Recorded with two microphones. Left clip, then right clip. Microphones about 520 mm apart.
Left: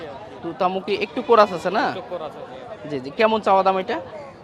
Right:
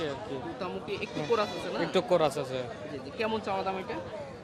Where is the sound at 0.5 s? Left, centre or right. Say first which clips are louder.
Left 14 dB; left.